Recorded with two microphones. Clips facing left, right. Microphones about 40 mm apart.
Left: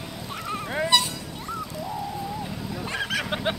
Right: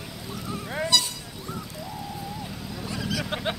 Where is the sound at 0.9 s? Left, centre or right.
Left.